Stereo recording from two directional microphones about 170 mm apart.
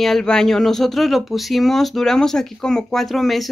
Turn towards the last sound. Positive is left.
turn(degrees=0)  # may be behind; listen again after turning